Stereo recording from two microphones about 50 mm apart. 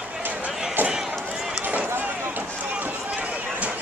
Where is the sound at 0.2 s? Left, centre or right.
Right.